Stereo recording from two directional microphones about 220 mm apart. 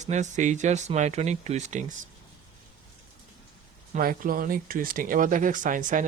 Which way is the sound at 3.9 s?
40° right (ahead or behind).